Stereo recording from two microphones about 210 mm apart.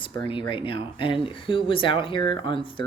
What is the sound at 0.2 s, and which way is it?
Speech, 25° left (ahead or behind).